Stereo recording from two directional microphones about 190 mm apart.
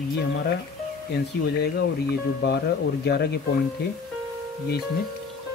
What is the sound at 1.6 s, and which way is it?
Speech, 60° left (ahead or behind).